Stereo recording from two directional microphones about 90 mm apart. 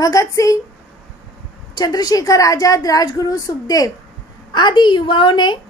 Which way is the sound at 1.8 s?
45° left (ahead or behind).